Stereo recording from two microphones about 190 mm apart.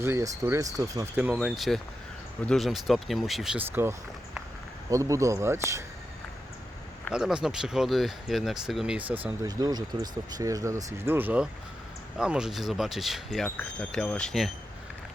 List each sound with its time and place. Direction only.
0.0 s speech: 15° right (ahead or behind)
7.1 s speech: 5° right (ahead or behind)
9.2 s speech: 20° right (ahead or behind); by 14.5 s centre (ahead or behind)